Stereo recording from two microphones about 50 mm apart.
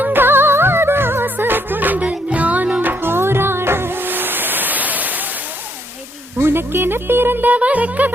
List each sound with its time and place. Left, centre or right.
0.0 s music: right
2.0 s music: right
2.8 s music: right
6.4 s speech: right